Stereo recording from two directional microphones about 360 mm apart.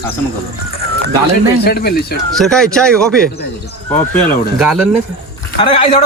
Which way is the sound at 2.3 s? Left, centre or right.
Centre.